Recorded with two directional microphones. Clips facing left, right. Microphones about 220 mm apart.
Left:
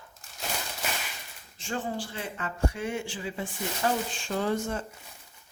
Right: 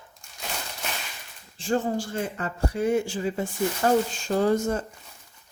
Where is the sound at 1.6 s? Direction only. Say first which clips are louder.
Right 7 dB; 40° right (ahead or behind).